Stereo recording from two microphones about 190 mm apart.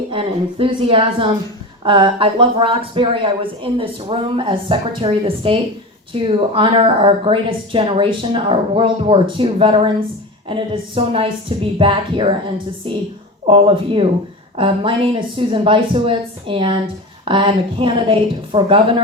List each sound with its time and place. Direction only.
0.1 s speech: 30° right (ahead or behind)